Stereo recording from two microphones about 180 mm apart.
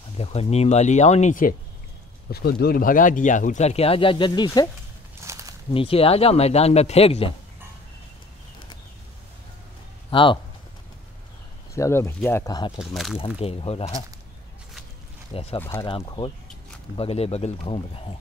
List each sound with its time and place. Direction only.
0.2 s speech: 35° left (ahead or behind)
2.3 s speech: 60° left (ahead or behind); by 4.6 s 25° left (ahead or behind)
5.2 s a sound: 15° right (ahead or behind)
5.7 s speech: 30° left (ahead or behind)
10.1 s speech: 25° left (ahead or behind)
11.7 s speech: 15° left (ahead or behind)
12.7 s speech: centre (ahead or behind)
13.4 s speech: 35° left (ahead or behind)
15.3 s speech: 30° left (ahead or behind)